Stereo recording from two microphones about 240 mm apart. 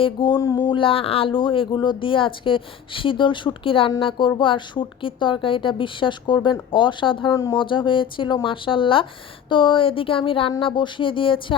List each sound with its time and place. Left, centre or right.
0.0 s speech: centre